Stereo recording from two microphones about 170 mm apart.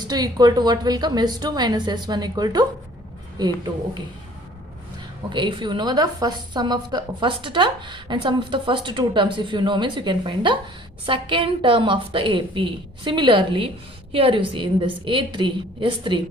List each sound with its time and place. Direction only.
0.0 s a woman's voice: 25° right (ahead or behind)
5.3 s a woman's voice: 30° right (ahead or behind)